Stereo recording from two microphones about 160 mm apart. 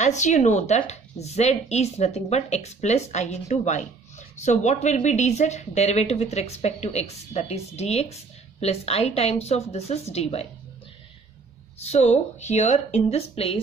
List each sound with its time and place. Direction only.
0.0 s a woman's voice: 45° left (ahead or behind)
11.8 s speech: 45° left (ahead or behind)